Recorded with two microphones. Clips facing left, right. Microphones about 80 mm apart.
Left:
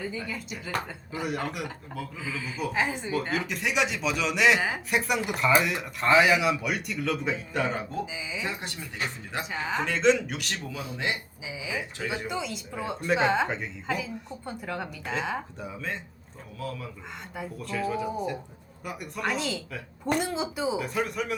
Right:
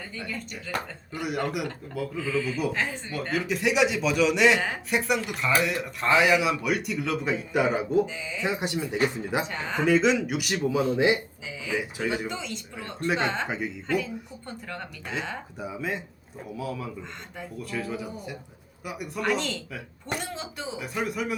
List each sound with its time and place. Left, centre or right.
0.0 s a woman's voice: centre
8.0 s a woman's voice: centre
8.4 s speech: centre
9.4 s a woman's voice: centre
10.6 s speech: centre
11.4 s speech: centre
11.8 s a woman's voice: centre
13.5 s a woman's voice: centre
15.5 s a woman's voice: centre